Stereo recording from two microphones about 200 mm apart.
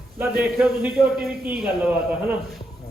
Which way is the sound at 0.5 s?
5° right (ahead or behind).